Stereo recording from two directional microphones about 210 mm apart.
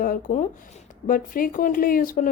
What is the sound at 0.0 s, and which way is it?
Speech, 40° left (ahead or behind).